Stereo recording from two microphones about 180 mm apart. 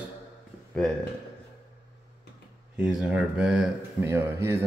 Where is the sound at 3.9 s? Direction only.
15° right (ahead or behind).